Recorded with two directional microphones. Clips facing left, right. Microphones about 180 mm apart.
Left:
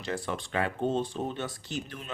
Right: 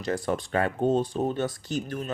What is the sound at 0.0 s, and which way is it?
Speech, 40° right (ahead or behind).